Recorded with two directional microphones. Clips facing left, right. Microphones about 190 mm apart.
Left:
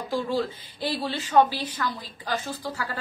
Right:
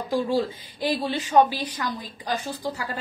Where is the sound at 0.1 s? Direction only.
15° right (ahead or behind).